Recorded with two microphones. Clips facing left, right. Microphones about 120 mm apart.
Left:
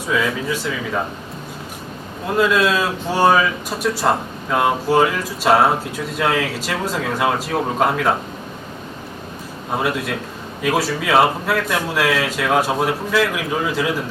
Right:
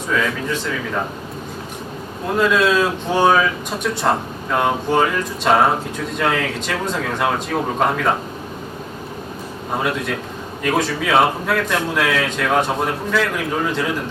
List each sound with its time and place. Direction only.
0.1 s speech: 5° left (ahead or behind)
2.2 s speech: centre (ahead or behind)
9.7 s speech: 5° left (ahead or behind)